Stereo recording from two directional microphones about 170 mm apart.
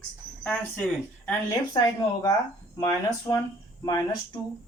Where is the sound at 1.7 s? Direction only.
20° left (ahead or behind).